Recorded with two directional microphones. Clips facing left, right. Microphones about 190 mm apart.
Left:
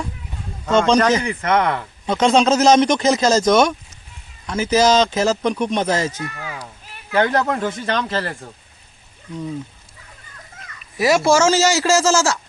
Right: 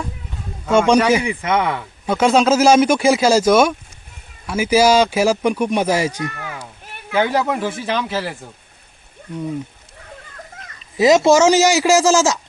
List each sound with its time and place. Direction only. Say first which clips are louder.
0.6 s a man's voice: right 1 dB; 10° right (ahead or behind)
10.8 s a man's voice: right 4 dB; 20° right (ahead or behind)